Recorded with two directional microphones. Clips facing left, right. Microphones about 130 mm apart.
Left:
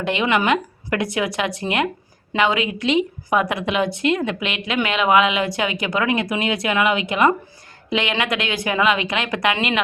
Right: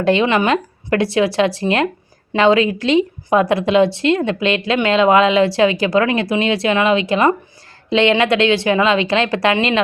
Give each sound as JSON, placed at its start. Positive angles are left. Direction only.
{"t": 0.0, "sound": "a woman's voice", "side_deg": -30}